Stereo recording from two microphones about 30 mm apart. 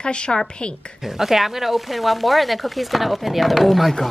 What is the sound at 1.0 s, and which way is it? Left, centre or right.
Speech, centre.